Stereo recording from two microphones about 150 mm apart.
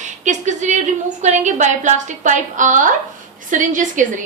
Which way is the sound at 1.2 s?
55° right (ahead or behind).